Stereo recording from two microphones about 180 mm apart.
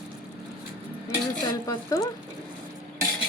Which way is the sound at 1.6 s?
20° left (ahead or behind).